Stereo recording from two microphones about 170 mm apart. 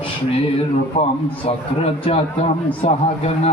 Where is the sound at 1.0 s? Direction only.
40° left (ahead or behind).